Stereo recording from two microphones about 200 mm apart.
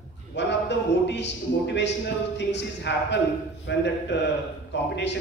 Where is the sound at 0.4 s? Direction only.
60° left (ahead or behind).